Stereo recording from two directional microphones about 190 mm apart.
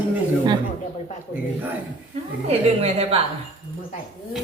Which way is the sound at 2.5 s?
30° right (ahead or behind).